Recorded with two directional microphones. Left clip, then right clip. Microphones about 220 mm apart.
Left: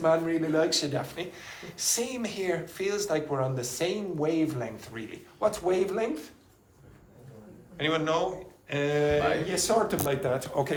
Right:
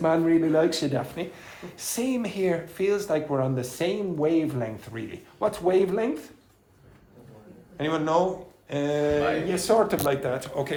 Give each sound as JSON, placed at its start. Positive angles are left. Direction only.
{"t": 0.0, "sound": "speech", "side_deg": -30}
{"t": 7.8, "sound": "speech", "side_deg": -20}
{"t": 9.6, "sound": "speech", "side_deg": -30}
{"t": 10.2, "sound": "speech", "side_deg": 10}